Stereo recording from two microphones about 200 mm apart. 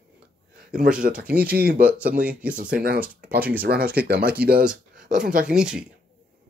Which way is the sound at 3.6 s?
50° right (ahead or behind).